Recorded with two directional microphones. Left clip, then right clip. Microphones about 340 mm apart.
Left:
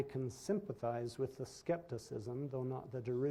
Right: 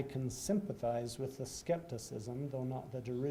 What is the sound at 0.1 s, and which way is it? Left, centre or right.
Speech, left.